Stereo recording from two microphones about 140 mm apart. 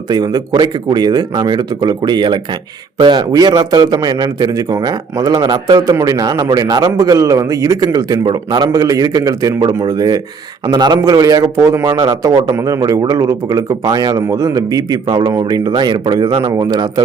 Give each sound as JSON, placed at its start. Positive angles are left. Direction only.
{"t": 0.1, "sound": "a man's voice", "side_deg": -30}